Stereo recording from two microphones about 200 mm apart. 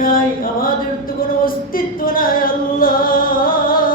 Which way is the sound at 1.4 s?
45° left (ahead or behind).